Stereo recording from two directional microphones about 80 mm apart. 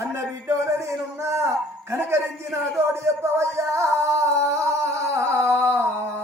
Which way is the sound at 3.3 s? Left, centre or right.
Right.